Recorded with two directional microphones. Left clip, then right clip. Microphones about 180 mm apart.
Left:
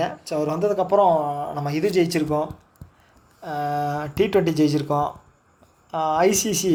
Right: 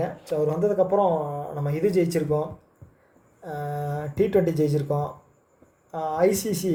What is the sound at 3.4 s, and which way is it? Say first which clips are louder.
Speech: left 7 dB; 25° left (ahead or behind).